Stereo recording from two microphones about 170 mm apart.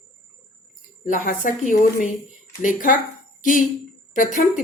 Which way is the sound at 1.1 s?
50° left (ahead or behind).